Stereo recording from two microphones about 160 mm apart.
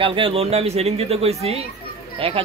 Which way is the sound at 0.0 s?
35° right (ahead or behind).